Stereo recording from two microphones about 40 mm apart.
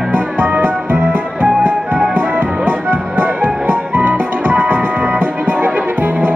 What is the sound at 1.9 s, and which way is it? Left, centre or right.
Music, left.